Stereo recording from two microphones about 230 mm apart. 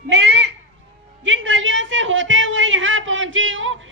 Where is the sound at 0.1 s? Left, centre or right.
Right.